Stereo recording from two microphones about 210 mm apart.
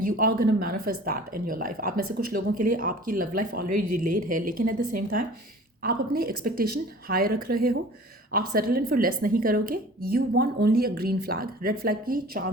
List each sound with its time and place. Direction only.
0.0 s speech: 40° right (ahead or behind)